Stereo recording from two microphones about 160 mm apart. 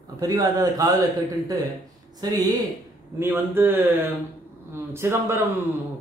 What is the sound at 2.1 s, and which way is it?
Speech, 25° right (ahead or behind).